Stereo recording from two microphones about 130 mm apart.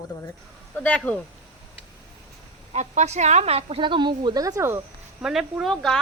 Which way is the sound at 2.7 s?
60° right (ahead or behind).